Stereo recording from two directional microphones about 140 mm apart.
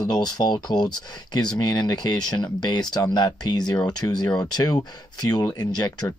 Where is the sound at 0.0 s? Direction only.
30° left (ahead or behind).